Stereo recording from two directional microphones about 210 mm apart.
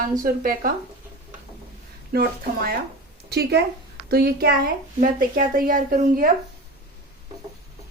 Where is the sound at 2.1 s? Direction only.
50° right (ahead or behind).